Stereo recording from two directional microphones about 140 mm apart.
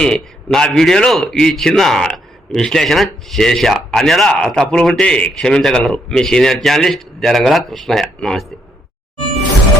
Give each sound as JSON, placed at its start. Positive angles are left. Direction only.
{"t": 0.0, "sound": "a man's voice", "side_deg": 5}